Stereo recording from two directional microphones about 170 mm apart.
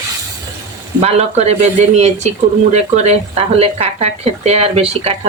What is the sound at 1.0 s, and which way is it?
Speech, 40° right (ahead or behind).